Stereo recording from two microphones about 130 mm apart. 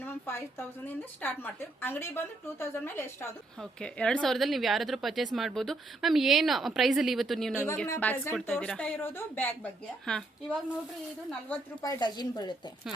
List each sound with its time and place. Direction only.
0.0 s a sound: 15° left (ahead or behind)
1.2 s a woman's voice: 15° left (ahead or behind)
3.6 s speech: 5° left (ahead or behind)
7.9 s a woman's voice: 15° left (ahead or behind)
8.4 s a woman's voice: 5° left (ahead or behind)
10.1 s speech: 5° left (ahead or behind)
11.3 s a woman's voice: 10° left (ahead or behind)
11.8 s speech: 30° left (ahead or behind)